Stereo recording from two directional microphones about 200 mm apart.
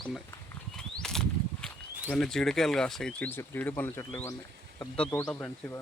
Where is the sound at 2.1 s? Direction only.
5° left (ahead or behind).